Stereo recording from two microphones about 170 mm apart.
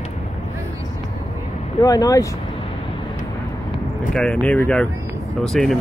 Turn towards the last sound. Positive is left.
turn(degrees=5)  # may be behind; listen again after turning